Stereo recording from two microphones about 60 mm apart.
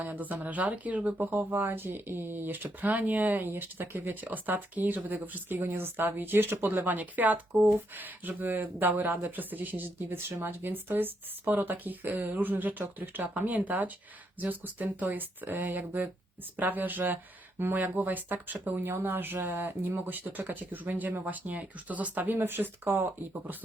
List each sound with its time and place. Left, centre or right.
0.0 s speech: right